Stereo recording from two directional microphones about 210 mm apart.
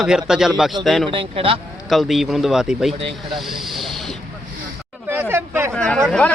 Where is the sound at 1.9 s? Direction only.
Centre (ahead or behind).